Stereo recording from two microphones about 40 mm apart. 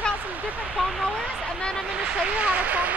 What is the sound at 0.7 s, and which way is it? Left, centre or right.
Vehicle, centre.